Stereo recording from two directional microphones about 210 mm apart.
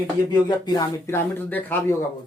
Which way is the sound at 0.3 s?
20° left (ahead or behind).